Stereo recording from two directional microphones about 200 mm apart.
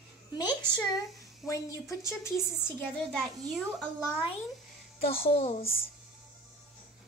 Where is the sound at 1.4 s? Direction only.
Centre (ahead or behind).